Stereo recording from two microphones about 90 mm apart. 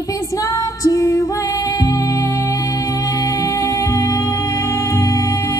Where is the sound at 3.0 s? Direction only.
40° left (ahead or behind).